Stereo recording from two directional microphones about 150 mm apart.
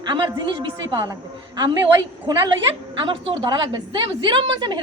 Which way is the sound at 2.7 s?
35° right (ahead or behind).